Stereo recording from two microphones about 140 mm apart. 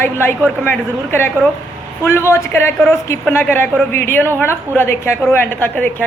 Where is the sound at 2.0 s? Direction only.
15° left (ahead or behind).